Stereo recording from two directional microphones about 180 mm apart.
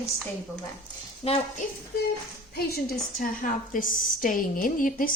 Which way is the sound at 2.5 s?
60° left (ahead or behind).